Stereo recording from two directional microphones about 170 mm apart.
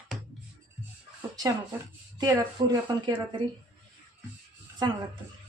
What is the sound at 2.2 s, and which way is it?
Speech, 25° right (ahead or behind).